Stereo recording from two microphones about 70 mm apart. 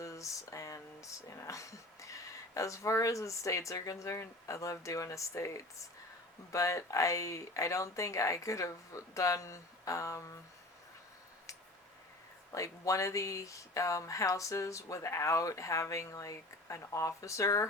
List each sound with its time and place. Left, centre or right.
0.0 s speech: left
12.5 s speech: left